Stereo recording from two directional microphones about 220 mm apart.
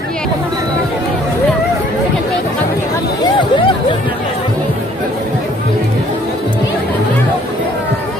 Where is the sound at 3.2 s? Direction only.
20° left (ahead or behind).